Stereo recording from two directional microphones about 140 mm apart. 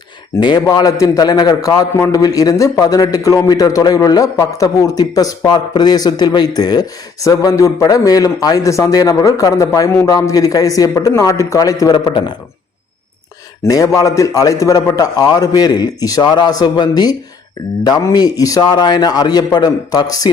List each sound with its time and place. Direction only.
0.3 s a man's voice: 30° left (ahead or behind)
13.7 s a man's voice: 25° left (ahead or behind)